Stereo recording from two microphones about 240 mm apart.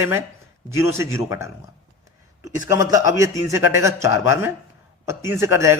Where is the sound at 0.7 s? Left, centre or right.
Centre.